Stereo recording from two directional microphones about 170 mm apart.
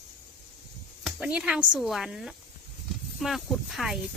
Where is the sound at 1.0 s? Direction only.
5° right (ahead or behind).